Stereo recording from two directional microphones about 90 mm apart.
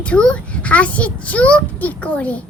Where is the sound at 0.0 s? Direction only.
15° left (ahead or behind).